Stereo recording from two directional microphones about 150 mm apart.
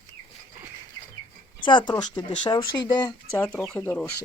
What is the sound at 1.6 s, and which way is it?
Speech, 30° left (ahead or behind).